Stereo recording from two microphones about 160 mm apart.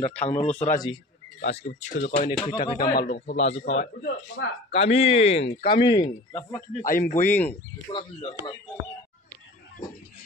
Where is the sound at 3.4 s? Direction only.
40° left (ahead or behind).